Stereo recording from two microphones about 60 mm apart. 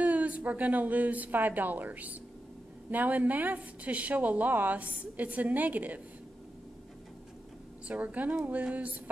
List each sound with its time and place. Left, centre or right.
0.0 s a sound: right
0.5 s a woman's voice: right
7.9 s a woman's voice: right